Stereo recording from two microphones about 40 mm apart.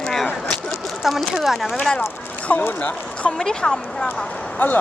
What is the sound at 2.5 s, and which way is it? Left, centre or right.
Speech, left.